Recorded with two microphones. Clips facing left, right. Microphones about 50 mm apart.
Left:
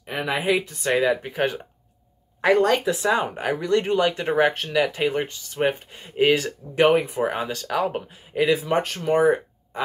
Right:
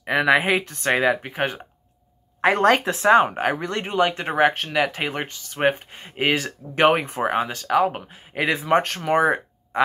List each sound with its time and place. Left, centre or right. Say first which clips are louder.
0.0 s speech: right 8 dB; right
0.5 s speech: right 1 dB; right
1.1 s speech: left 1 dB; right
2.8 s speech: right 5 dB; right
7.3 s speech: right 5 dB; right
8.4 s speech: right 1 dB; right
9.1 s a sound: left 1 dB; right